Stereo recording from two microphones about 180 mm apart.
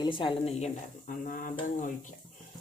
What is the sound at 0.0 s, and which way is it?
Speech, 30° left (ahead or behind).